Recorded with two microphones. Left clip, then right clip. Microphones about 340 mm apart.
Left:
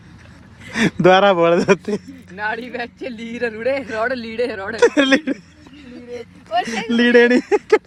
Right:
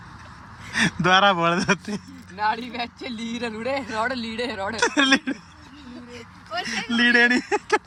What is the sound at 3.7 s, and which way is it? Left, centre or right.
Speech, centre.